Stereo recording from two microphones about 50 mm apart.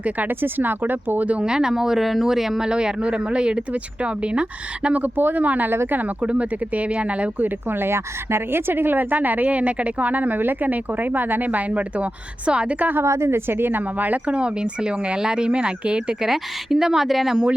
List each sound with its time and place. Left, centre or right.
0.0 s speech: right
1.3 s speech: centre
5.0 s speech: right; by 12.7 s centre
12.8 s speech: right
14.3 s speech: right
16.2 s speech: centre